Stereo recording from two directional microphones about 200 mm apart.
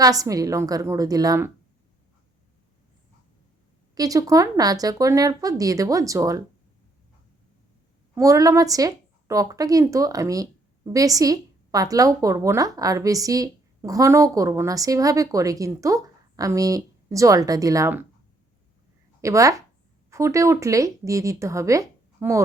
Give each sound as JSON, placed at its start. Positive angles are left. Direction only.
{"t": 0.0, "sound": "speech", "side_deg": -15}
{"t": 3.9, "sound": "speech", "side_deg": -15}
{"t": 8.1, "sound": "speech", "side_deg": -15}
{"t": 19.2, "sound": "speech", "side_deg": -15}